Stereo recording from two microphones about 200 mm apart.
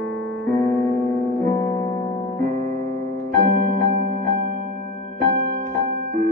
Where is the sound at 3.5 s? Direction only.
45° right (ahead or behind).